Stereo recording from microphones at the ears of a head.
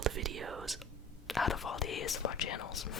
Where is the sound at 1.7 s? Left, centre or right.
Left.